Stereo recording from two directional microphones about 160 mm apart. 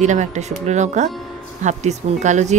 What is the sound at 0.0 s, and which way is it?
A woman's voice, 45° right (ahead or behind).